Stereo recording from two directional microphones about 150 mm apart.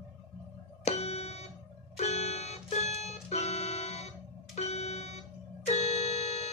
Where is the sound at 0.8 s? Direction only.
45° left (ahead or behind).